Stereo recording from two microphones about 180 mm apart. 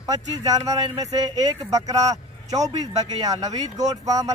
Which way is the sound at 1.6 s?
20° right (ahead or behind).